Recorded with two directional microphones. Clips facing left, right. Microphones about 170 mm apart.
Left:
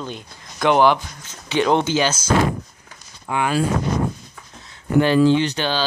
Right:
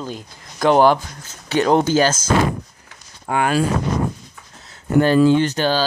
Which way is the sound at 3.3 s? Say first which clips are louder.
Right 3 dB; 50° right (ahead or behind).